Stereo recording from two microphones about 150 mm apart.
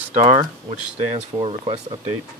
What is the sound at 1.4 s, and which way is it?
Speech, 35° right (ahead or behind).